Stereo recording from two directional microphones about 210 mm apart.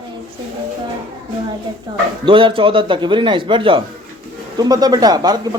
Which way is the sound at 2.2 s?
25° right (ahead or behind).